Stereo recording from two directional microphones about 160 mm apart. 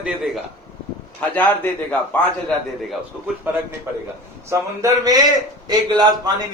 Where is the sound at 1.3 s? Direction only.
10° left (ahead or behind).